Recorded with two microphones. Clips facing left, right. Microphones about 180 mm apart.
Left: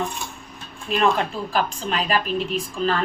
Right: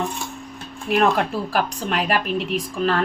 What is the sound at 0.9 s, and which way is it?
A woman's voice, 70° right (ahead or behind).